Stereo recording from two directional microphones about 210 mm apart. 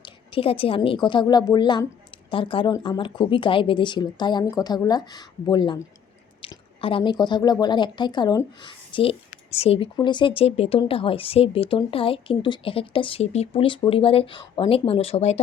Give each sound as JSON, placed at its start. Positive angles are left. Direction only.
{"t": 0.0, "sound": "a woman's voice", "side_deg": 25}